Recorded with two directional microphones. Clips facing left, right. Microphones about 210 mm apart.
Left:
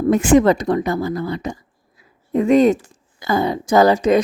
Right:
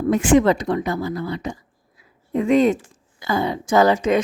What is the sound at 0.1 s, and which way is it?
A woman's voice, 45° left (ahead or behind).